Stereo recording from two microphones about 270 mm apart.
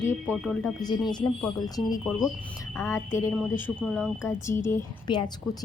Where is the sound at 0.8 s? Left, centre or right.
Centre.